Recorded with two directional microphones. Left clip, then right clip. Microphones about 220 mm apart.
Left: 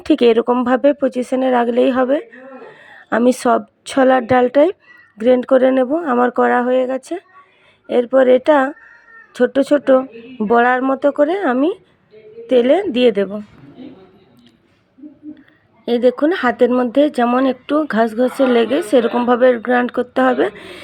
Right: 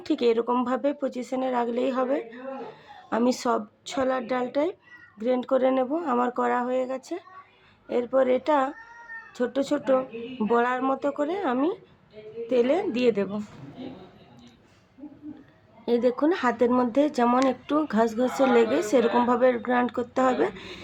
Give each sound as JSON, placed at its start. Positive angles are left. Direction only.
{"t": 0.0, "sound": "a woman's voice", "side_deg": 35}
{"t": 15.9, "sound": "a woman's voice", "side_deg": 25}